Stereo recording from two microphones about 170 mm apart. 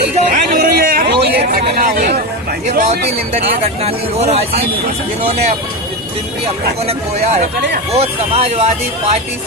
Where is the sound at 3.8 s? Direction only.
35° right (ahead or behind).